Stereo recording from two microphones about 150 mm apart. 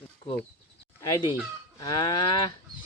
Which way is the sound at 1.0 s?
25° left (ahead or behind).